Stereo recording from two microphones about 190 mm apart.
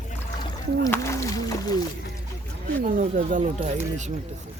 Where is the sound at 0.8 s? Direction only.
15° left (ahead or behind).